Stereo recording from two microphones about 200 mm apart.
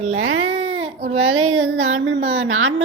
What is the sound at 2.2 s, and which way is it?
Speech, 30° right (ahead or behind).